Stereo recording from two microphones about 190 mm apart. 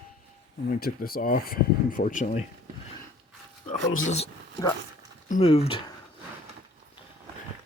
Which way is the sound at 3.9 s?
40° left (ahead or behind).